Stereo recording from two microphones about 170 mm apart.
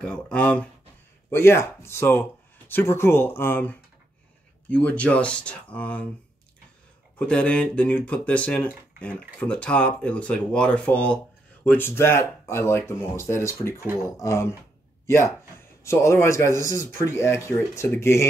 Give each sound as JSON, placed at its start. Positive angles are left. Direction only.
{"t": 0.0, "sound": "speech", "side_deg": 5}
{"t": 7.2, "sound": "speech", "side_deg": 5}